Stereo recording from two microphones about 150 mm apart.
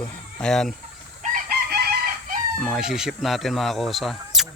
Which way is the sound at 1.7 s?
90° right.